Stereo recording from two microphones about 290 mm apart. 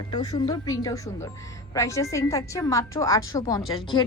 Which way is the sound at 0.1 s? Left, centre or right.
Centre.